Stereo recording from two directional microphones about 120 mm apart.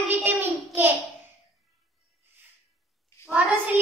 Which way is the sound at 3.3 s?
5° right (ahead or behind).